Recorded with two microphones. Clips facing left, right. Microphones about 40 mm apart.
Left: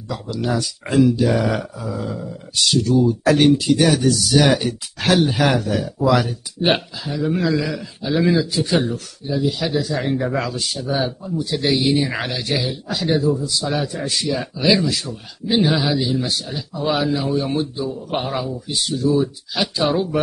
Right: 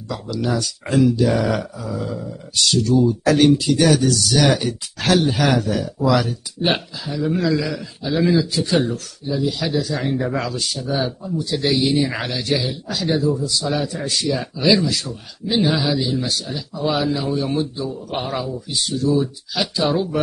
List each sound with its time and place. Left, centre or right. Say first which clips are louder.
0.1 s speech: even; centre
4.6 s speech: left 1 dB; centre